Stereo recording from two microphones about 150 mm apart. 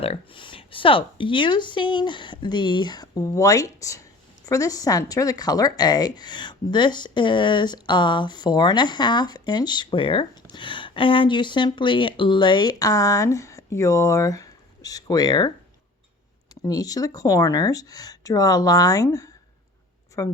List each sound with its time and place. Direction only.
0.0 s speech: 40° left (ahead or behind)
16.6 s speech: 25° left (ahead or behind)